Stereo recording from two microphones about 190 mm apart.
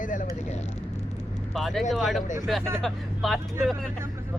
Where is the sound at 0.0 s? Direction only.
45° left (ahead or behind).